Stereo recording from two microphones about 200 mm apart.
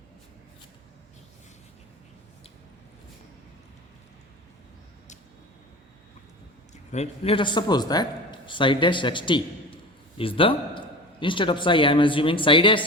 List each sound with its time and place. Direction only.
6.9 s a man's voice: 30° left (ahead or behind)